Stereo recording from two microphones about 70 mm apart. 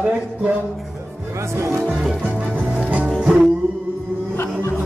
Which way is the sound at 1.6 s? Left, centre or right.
Right.